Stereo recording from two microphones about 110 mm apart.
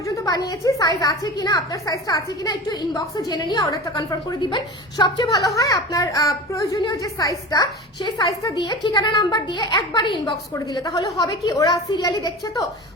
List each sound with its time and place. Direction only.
0.0 s a woman's voice: 35° left (ahead or behind)